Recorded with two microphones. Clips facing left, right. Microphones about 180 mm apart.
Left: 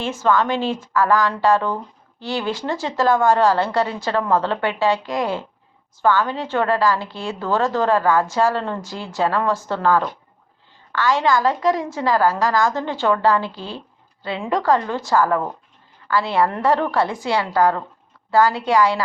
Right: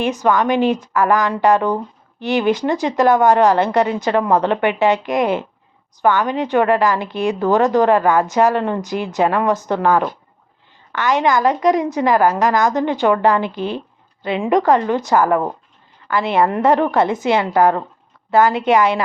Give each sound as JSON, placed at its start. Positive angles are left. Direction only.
{"t": 0.0, "sound": "a woman's voice", "side_deg": -15}